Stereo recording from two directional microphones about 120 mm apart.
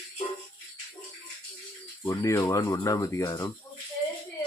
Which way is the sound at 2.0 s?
25° left (ahead or behind).